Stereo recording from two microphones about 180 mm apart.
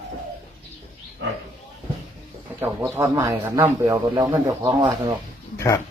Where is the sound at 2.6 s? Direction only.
15° right (ahead or behind).